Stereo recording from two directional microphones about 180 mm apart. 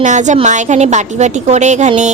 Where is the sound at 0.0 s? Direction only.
40° right (ahead or behind).